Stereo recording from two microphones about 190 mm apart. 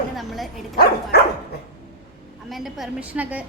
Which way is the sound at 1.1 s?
60° left (ahead or behind).